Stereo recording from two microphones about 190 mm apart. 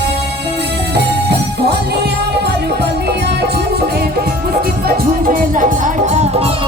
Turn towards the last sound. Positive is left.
turn(degrees=-35)  # may be behind; listen again after turning